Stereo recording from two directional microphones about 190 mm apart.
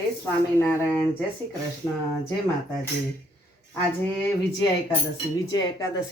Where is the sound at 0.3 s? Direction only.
15° left (ahead or behind).